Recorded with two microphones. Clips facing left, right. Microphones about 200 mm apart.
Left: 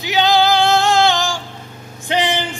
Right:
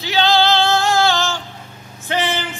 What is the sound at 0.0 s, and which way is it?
Male singing, 15° left (ahead or behind).